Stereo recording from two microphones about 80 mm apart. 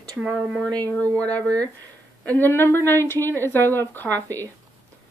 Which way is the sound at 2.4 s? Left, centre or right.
Left.